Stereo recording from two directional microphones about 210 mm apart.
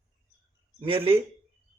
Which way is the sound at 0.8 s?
25° right (ahead or behind).